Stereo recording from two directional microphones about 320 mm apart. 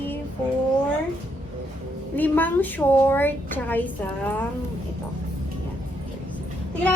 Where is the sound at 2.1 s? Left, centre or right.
Centre.